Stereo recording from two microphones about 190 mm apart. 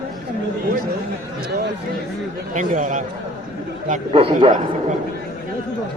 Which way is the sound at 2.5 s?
40° right (ahead or behind).